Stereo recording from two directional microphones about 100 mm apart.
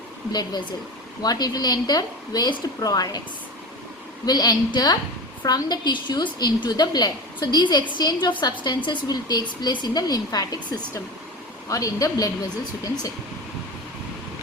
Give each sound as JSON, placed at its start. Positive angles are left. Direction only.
{"t": 1.2, "sound": "a woman's voice", "side_deg": 40}
{"t": 4.3, "sound": "a woman's voice", "side_deg": 45}